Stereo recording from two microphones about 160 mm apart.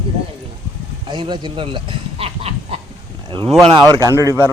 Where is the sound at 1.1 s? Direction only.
30° right (ahead or behind).